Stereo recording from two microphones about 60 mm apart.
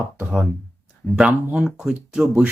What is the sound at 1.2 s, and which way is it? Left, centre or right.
Speech, centre.